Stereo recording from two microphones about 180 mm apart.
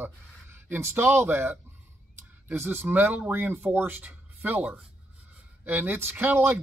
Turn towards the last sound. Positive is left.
turn(degrees=-10)  # may be behind; listen again after turning